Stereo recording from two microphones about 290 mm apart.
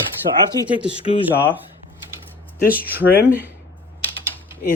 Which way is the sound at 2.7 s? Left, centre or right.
Centre.